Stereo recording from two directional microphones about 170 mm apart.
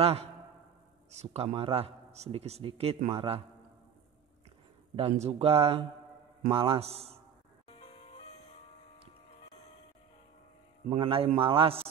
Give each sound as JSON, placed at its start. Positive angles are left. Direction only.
{"t": 0.0, "sound": "a man's voice", "side_deg": -35}
{"t": 4.9, "sound": "a man's voice", "side_deg": -35}
{"t": 10.9, "sound": "a man's voice", "side_deg": -35}